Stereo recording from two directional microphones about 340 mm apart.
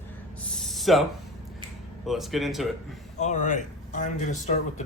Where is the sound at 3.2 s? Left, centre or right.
Left.